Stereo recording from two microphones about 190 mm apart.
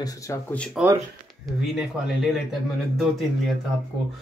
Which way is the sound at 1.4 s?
Centre (ahead or behind).